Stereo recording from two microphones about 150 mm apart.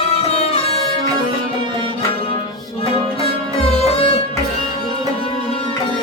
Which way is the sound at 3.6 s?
40° left (ahead or behind).